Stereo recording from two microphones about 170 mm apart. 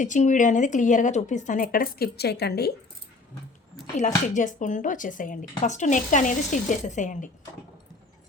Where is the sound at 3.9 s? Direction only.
45° left (ahead or behind).